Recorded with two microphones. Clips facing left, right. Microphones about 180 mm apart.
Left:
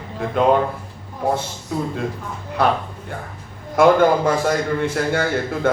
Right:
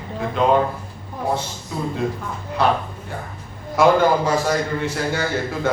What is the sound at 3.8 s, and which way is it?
A man's voice, 55° left (ahead or behind).